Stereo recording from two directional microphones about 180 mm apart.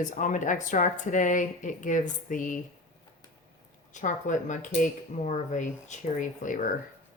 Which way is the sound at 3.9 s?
45° left (ahead or behind).